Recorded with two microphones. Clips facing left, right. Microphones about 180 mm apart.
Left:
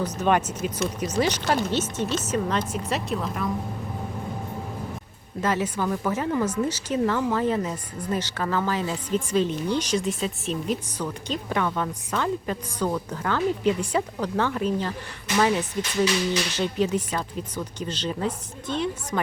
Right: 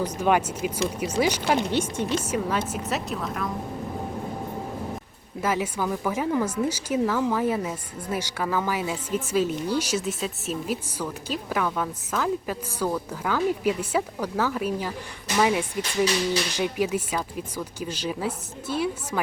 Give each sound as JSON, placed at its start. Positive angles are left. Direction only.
{"t": 0.0, "sound": "a woman's voice", "side_deg": -10}
{"t": 5.4, "sound": "speech", "side_deg": -10}